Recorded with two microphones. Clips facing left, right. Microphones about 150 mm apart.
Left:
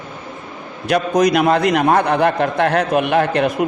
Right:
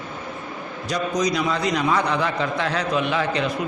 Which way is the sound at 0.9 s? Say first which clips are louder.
Left 8 dB; 60° left (ahead or behind).